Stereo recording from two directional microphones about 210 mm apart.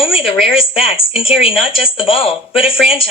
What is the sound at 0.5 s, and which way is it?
Speech, 25° left (ahead or behind).